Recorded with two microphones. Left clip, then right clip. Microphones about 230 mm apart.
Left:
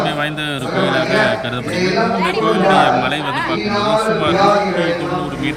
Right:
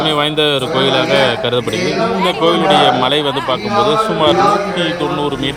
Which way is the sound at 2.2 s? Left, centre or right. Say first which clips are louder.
Right 3 dB; right.